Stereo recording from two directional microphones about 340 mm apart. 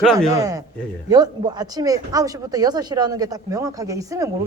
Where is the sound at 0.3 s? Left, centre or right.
Centre.